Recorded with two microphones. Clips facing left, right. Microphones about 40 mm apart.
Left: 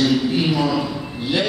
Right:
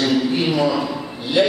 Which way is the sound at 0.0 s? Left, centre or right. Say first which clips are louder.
Even; centre.